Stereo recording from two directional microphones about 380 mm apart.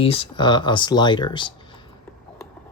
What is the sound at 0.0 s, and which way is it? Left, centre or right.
Speech, centre.